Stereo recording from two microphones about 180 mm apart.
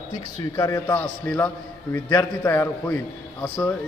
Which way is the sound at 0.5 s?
20° left (ahead or behind).